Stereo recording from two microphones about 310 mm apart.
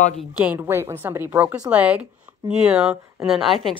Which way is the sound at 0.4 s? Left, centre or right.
Centre.